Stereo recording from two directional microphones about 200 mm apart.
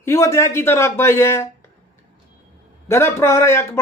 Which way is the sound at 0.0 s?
15° left (ahead or behind).